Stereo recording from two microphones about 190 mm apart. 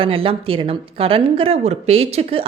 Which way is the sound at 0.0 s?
30° right (ahead or behind).